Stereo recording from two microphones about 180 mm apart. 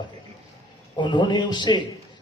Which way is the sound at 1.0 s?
25° left (ahead or behind).